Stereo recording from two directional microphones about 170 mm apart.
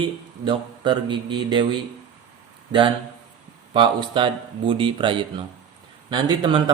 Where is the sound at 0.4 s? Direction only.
30° right (ahead or behind).